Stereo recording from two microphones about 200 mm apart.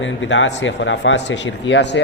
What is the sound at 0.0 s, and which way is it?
Speech, 70° left (ahead or behind).